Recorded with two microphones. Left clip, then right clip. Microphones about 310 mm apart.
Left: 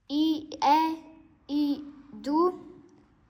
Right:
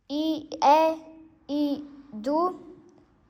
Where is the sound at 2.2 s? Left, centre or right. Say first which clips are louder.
Even; right.